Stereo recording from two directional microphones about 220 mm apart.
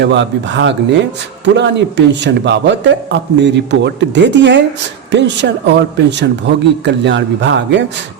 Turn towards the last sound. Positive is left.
turn(degrees=-55)  # may be behind; listen again after turning